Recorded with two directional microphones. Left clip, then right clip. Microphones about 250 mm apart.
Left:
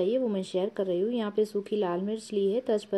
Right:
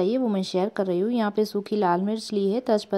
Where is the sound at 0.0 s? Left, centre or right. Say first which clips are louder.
Right 3 dB; right.